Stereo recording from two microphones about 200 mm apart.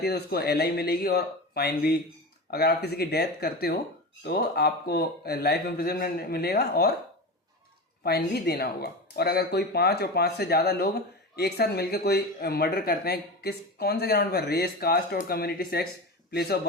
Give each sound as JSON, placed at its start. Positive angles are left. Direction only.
{"t": 0.0, "sound": "speech", "side_deg": 50}
{"t": 8.0, "sound": "speech", "side_deg": 50}